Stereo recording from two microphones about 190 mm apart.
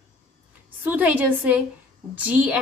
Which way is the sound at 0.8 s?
10° right (ahead or behind).